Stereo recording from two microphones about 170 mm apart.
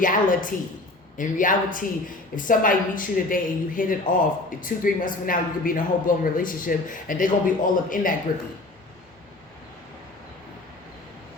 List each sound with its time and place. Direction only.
0.0 s speech: 50° left (ahead or behind)